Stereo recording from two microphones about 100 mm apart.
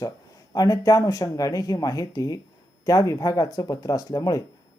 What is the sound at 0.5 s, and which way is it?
Speech, 35° left (ahead or behind).